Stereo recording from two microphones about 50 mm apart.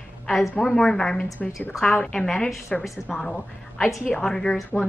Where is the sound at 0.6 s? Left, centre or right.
Centre.